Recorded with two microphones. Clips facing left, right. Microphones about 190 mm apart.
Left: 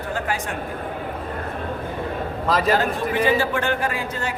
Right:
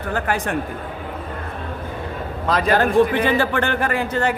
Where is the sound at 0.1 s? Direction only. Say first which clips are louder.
Right 4 dB; 60° right (ahead or behind).